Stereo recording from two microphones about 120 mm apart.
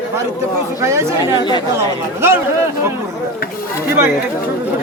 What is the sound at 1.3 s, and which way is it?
Speech, 40° left (ahead or behind).